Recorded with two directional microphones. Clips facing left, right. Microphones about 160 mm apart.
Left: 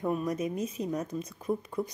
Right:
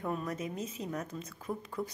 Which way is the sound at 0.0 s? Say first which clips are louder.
Left 6 dB; 15° left (ahead or behind).